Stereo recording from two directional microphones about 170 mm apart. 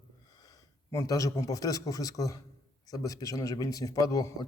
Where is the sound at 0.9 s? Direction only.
20° left (ahead or behind).